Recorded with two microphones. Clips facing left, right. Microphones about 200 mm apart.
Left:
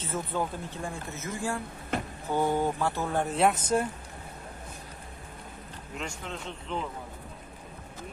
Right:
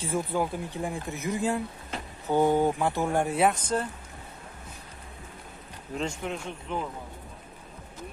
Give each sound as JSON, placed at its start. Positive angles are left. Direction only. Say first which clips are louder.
{"t": 0.0, "sound": "speech", "louder": "right 4 dB", "side_deg": -10}
{"t": 1.9, "sound": "a sound", "louder": "left 8 dB", "side_deg": 55}
{"t": 2.3, "sound": "speech", "louder": "right 4 dB", "side_deg": -15}
{"t": 3.5, "sound": "speech", "louder": "left 2 dB", "side_deg": 10}
{"t": 6.0, "sound": "speech", "louder": "right 5 dB", "side_deg": -15}